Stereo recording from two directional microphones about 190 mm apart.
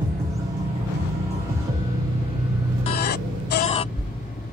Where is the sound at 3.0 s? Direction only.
55° left (ahead or behind).